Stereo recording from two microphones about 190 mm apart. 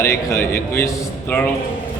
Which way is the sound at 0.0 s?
15° left (ahead or behind).